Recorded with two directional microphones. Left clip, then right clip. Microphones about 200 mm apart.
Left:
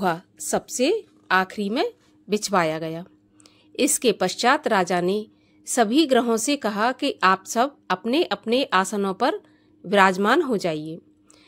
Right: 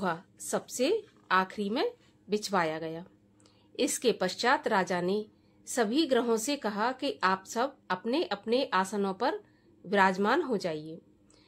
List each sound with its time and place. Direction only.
0.0 s a woman's voice: 35° left (ahead or behind)